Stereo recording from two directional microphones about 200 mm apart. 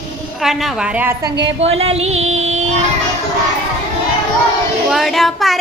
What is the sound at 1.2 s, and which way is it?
Speech, 55° right (ahead or behind).